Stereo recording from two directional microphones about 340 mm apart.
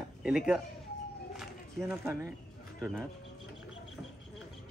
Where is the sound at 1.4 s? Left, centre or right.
Centre.